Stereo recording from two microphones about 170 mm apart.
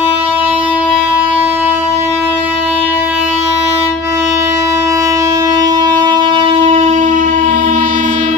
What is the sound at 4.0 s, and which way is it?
Wind instrument, 15° right (ahead or behind).